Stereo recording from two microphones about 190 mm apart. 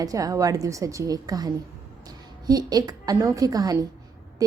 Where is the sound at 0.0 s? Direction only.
20° right (ahead or behind).